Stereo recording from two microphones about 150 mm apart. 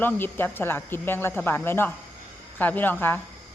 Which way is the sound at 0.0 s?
15° left (ahead or behind).